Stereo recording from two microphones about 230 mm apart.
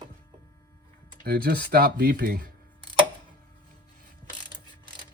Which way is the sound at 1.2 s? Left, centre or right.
Right.